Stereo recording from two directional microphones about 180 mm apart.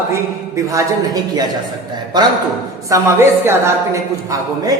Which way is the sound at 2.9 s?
15° right (ahead or behind).